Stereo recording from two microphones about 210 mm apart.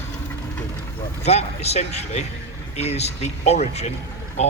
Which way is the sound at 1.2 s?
30° left (ahead or behind).